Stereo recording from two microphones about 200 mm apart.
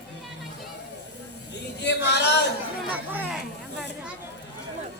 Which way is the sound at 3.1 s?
10° right (ahead or behind).